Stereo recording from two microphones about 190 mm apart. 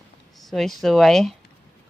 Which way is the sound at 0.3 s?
Centre (ahead or behind).